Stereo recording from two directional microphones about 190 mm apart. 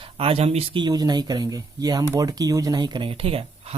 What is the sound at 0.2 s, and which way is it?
Speech, 30° right (ahead or behind).